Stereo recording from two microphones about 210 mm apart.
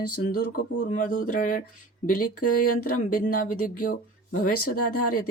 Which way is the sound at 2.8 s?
40° left (ahead or behind).